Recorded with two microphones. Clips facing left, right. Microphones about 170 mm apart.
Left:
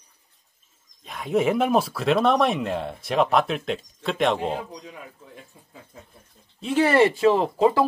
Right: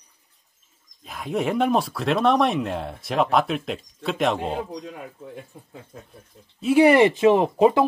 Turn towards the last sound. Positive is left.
turn(degrees=-20)  # may be behind; listen again after turning